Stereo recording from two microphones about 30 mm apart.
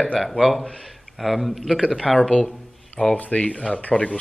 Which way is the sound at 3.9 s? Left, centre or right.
Left.